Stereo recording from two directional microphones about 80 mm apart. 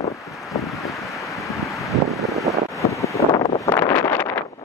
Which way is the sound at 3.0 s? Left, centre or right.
Left.